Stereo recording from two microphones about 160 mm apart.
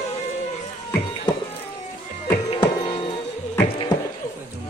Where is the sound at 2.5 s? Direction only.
30° left (ahead or behind).